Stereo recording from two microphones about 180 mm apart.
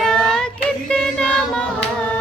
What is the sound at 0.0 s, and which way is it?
Child singing, 5° left (ahead or behind).